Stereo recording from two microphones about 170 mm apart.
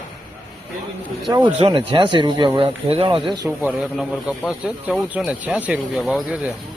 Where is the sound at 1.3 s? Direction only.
30° right (ahead or behind).